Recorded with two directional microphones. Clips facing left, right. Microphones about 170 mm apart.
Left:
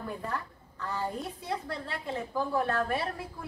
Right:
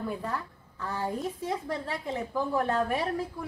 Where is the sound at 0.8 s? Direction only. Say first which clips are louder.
Right 2 dB; 10° right (ahead or behind).